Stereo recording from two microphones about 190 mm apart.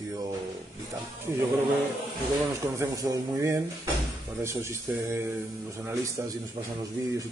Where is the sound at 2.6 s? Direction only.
15° right (ahead or behind).